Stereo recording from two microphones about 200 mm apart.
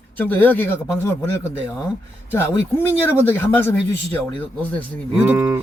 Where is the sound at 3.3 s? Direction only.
10° left (ahead or behind).